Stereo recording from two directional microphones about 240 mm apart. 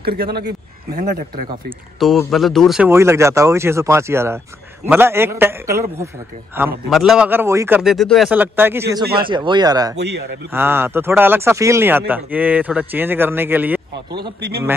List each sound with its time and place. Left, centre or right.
0.0 s speech: right
2.0 s speech: centre
9.9 s a man's voice: right
10.5 s speech: centre